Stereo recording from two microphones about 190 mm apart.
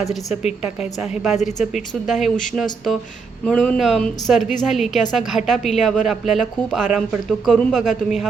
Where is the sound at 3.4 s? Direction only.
5° left (ahead or behind).